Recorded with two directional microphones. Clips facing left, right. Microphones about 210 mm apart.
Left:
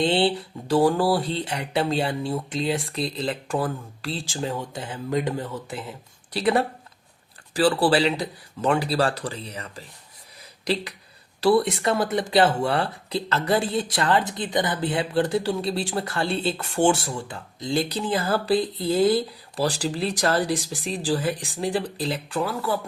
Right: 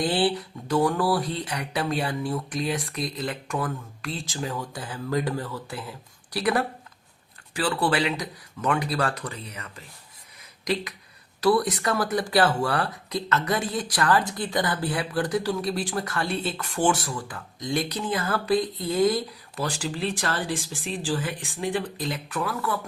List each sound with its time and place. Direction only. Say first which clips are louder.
0.0 s speech: left 2 dB; 25° left (ahead or behind)
11.3 s speech: left 2 dB; 30° left (ahead or behind)